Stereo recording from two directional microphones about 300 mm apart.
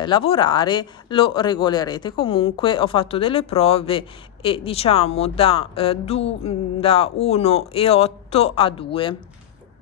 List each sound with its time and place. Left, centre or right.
0.0 s speech: centre